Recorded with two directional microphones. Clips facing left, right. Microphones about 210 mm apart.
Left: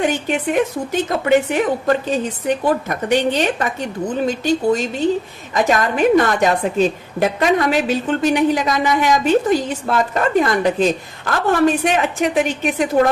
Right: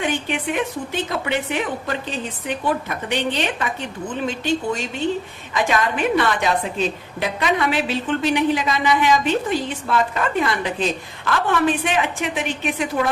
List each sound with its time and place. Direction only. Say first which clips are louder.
0.0 s a woman's voice: left 4 dB; 40° left (ahead or behind)